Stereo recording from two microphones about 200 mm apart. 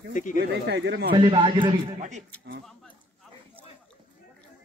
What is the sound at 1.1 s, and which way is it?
Speech, 25° right (ahead or behind).